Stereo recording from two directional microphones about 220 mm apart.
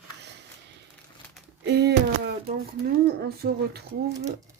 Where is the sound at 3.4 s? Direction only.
50° right (ahead or behind).